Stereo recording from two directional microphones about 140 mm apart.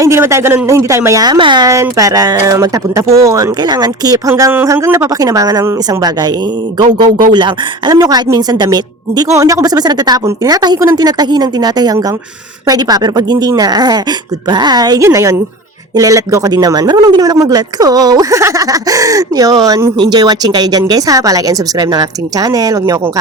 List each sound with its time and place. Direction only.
0.0 s speech: 20° right (ahead or behind)
7.3 s speech: 35° right (ahead or behind)